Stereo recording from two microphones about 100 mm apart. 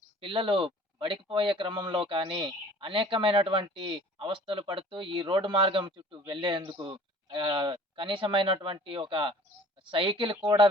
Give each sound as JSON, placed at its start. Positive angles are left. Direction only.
{"t": 0.2, "sound": "speech", "side_deg": -55}